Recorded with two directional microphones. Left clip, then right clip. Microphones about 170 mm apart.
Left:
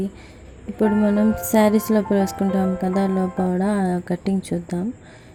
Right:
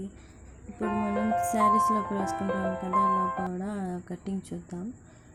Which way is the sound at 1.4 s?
20° left (ahead or behind).